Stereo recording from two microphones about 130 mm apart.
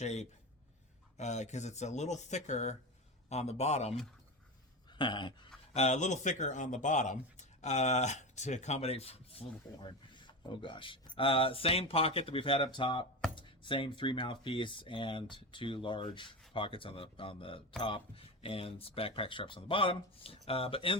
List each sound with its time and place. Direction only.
0.0 s speech: 60° left (ahead or behind)
4.9 s a sound: 35° left (ahead or behind)
5.7 s speech: 60° left (ahead or behind); by 21.0 s 45° left (ahead or behind)